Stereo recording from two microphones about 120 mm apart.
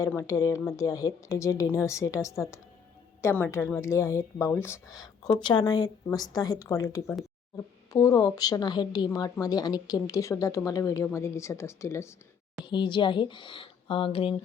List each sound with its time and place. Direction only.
0.1 s speech: 25° left (ahead or behind)
4.9 s a woman's voice: 35° left (ahead or behind)
12.6 s speech: 40° left (ahead or behind)